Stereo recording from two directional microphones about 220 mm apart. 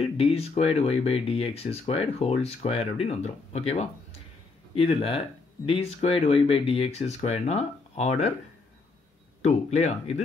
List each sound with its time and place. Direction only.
0.0 s speech: 25° left (ahead or behind)
9.4 s speech: 30° left (ahead or behind)